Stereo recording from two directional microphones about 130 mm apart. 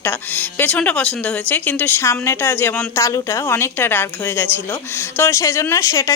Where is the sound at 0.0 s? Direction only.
15° left (ahead or behind).